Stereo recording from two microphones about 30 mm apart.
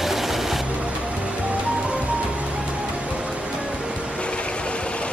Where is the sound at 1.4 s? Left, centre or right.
Right.